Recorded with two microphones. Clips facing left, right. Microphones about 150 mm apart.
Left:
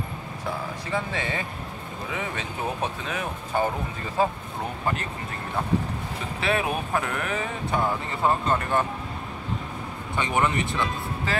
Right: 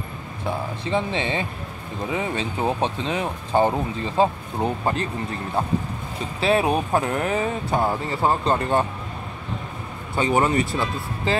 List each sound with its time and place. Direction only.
0.8 s speech: 25° right (ahead or behind)
6.4 s speech: 30° right (ahead or behind)
10.1 s speech: 40° right (ahead or behind)
11.3 s speech: 25° right (ahead or behind)